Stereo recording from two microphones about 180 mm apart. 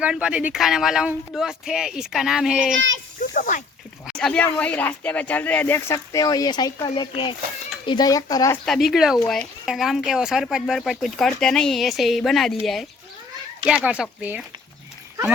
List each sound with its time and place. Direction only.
0.0 s speech: 5° right (ahead or behind)
3.2 s snake: 45° left (ahead or behind)
4.0 s a child's voice: centre (ahead or behind); by 8.5 s 20° left (ahead or behind)
8.6 s speech: centre (ahead or behind)